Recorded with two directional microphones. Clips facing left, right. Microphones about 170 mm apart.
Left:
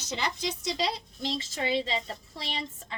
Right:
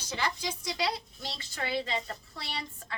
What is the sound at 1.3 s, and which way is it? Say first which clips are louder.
A woman's voice: left 4 dB; 20° left (ahead or behind).